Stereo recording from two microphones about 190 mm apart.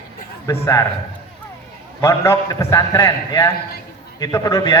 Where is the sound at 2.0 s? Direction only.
15° left (ahead or behind).